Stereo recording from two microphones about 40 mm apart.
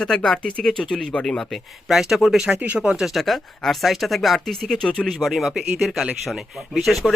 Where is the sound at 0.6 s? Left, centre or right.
Centre.